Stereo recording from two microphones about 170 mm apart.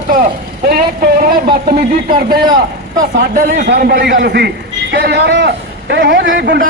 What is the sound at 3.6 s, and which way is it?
A man's voice, 70° right (ahead or behind).